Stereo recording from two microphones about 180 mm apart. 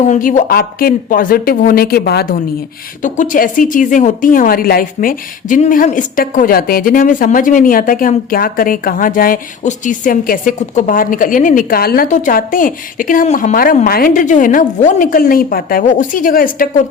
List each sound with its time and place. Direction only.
0.0 s a woman's voice: 45° left (ahead or behind)
3.0 s a woman's voice: 45° left (ahead or behind)